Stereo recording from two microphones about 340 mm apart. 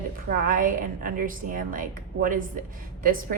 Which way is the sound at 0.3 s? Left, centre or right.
Right.